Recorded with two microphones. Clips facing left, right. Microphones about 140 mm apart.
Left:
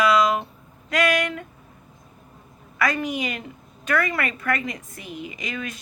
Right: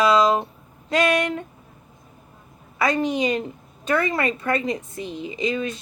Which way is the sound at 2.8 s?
25° right (ahead or behind).